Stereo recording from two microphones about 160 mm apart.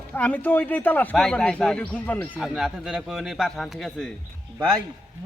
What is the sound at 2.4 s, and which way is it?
A man's voice, centre (ahead or behind).